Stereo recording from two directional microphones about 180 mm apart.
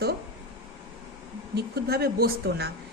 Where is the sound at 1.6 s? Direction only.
60° right (ahead or behind).